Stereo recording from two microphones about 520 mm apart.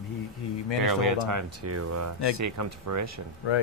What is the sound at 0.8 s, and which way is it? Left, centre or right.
Speech, right.